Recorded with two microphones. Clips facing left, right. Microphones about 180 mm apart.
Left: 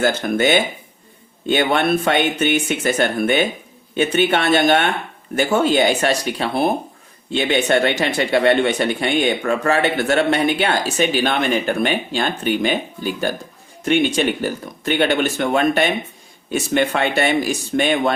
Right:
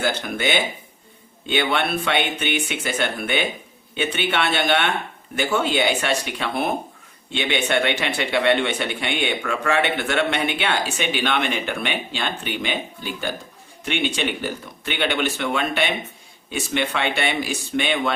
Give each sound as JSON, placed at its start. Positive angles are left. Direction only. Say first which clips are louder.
{"t": 0.0, "sound": "speech", "louder": "left 6 dB", "side_deg": 45}